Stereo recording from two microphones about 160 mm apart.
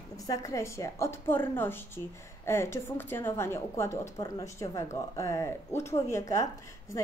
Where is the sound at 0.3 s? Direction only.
20° left (ahead or behind).